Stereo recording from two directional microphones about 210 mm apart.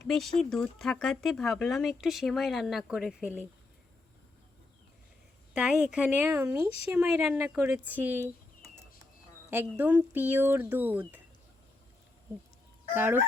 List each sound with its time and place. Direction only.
0.0 s speech: centre (ahead or behind)
5.5 s speech: centre (ahead or behind)
9.5 s speech: 10° right (ahead or behind)
12.9 s speech: 10° right (ahead or behind)